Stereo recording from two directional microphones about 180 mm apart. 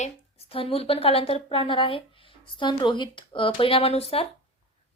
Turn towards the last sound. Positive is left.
turn(degrees=35)  # may be behind; listen again after turning